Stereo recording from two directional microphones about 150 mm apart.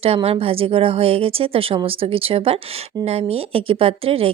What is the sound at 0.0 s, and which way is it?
Speech, 40° right (ahead or behind).